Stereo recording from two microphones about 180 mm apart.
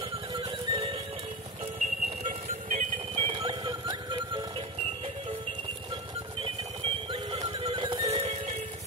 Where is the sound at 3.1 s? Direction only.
30° right (ahead or behind).